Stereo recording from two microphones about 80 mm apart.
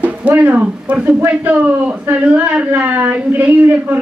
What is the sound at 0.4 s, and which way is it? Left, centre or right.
Speech, centre.